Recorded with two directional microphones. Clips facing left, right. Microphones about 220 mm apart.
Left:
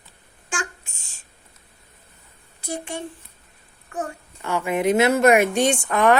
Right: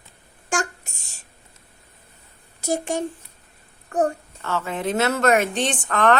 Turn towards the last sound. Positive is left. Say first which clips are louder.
# left 2 dB
turn(degrees=10)  # may be behind; listen again after turning